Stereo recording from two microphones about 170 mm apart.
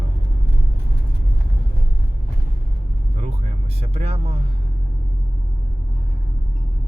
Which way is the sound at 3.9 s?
35° right (ahead or behind).